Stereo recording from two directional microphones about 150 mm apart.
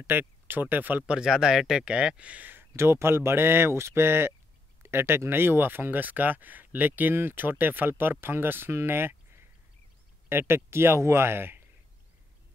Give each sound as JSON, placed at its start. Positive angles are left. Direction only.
{"t": 0.0, "sound": "speech", "side_deg": -15}